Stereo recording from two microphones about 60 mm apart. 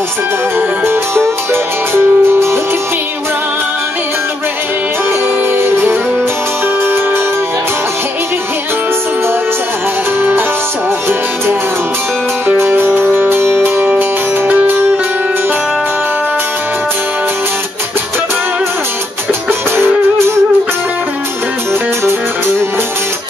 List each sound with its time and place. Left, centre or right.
0.6 s music: right
5.6 s music: right
12.6 s music: right